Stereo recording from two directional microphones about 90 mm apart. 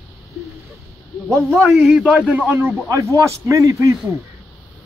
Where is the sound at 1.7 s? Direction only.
5° right (ahead or behind); by 3.9 s 35° right (ahead or behind).